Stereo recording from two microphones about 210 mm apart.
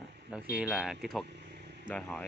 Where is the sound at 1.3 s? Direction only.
55° right (ahead or behind).